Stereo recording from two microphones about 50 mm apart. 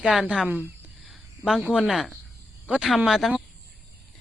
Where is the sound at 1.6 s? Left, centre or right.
Right.